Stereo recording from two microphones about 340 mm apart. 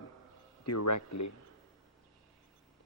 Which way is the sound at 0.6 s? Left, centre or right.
Left.